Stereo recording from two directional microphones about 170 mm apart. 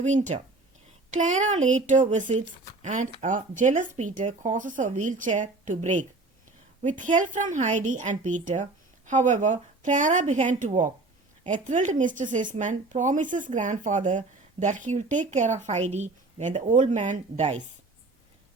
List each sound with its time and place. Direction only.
0.0 s speech: 45° right (ahead or behind)